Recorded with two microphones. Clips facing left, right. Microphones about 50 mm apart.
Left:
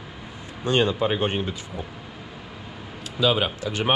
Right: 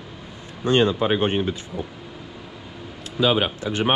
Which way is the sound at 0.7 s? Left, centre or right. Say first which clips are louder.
Right 3 dB; right.